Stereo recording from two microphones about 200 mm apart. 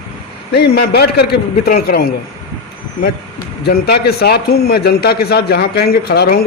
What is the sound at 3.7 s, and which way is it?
A man's voice, 50° left (ahead or behind).